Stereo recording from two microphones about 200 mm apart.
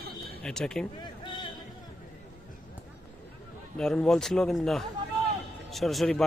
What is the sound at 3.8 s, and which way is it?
Speech, 5° left (ahead or behind).